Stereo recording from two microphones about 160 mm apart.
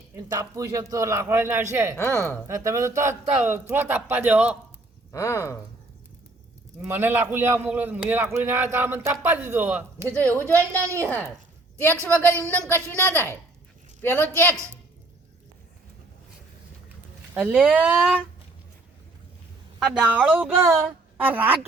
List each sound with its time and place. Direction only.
0.3 s a man's voice: 20° right (ahead or behind)
2.0 s speech: 15° left (ahead or behind)
2.5 s a man's voice: 20° right (ahead or behind)
5.1 s speech: 15° left (ahead or behind)
6.8 s a man's voice: 15° right (ahead or behind)
12.1 s speech: 10° left (ahead or behind)
17.3 s a man's voice: 10° right (ahead or behind)
19.8 s a man's voice: 5° right (ahead or behind)